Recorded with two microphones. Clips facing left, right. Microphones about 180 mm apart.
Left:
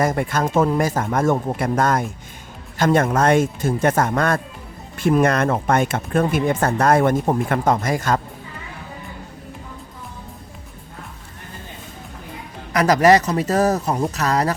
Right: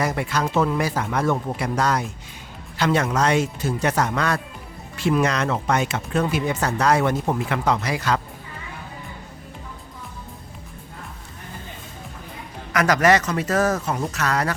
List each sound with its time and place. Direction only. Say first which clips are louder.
0.0 s speech: left 4 dB; 50° left (ahead or behind)
12.7 s speech: left 4 dB; 35° left (ahead or behind)